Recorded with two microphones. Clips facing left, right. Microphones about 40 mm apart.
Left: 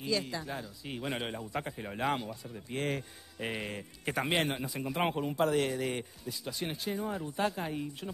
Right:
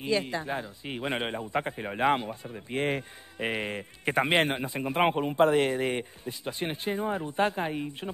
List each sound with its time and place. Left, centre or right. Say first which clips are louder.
0.0 s speech: right 5 dB; right